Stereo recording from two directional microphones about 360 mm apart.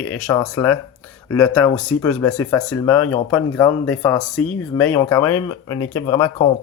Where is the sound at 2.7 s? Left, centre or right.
Left.